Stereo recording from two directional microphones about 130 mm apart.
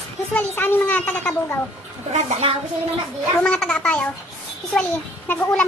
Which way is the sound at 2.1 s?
55° right (ahead or behind).